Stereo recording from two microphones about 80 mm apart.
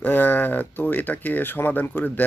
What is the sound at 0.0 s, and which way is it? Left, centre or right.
Speech, left.